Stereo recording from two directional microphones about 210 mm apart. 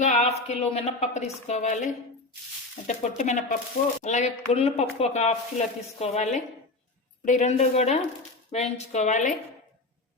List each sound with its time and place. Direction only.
0.0 s speech: 35° left (ahead or behind)